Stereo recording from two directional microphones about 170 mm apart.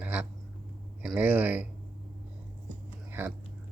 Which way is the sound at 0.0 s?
10° right (ahead or behind).